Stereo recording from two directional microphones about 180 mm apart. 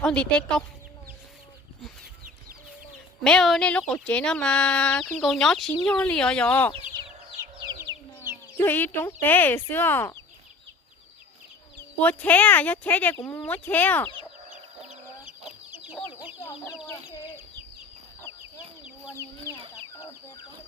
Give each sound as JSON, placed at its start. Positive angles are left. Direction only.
{"t": 0.0, "sound": "speech", "side_deg": 5}
{"t": 3.2, "sound": "speech", "side_deg": 5}
{"t": 8.6, "sound": "speech", "side_deg": 10}
{"t": 11.8, "sound": "speech", "side_deg": 10}
{"t": 14.8, "sound": "chicken", "side_deg": -5}